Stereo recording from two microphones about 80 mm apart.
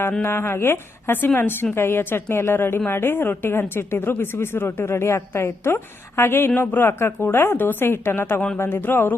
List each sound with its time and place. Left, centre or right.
0.2 s a woman's voice: left